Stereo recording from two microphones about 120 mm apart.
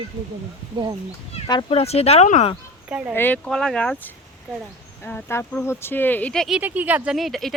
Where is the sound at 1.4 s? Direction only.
60° left (ahead or behind).